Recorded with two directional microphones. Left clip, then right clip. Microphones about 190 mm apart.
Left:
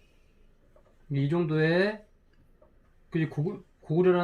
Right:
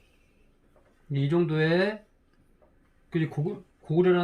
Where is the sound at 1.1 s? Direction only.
30° right (ahead or behind).